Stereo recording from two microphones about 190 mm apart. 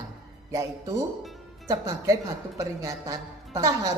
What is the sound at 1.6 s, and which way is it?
A woman's voice, 15° right (ahead or behind).